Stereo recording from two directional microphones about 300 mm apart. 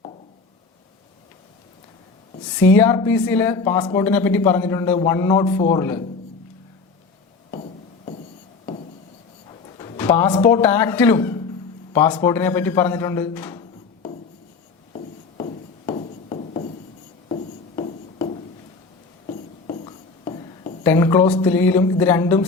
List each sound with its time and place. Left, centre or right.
2.6 s a woman's voice: centre
7.5 s music: left
9.5 s speech: centre
14.9 s a sound: centre
20.8 s a woman's voice: centre